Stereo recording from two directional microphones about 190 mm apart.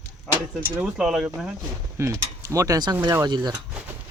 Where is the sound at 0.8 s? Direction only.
5° right (ahead or behind); by 3.6 s 20° right (ahead or behind).